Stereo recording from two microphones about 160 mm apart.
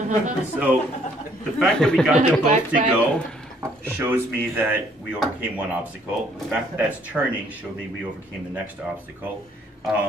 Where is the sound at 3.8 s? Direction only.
15° right (ahead or behind).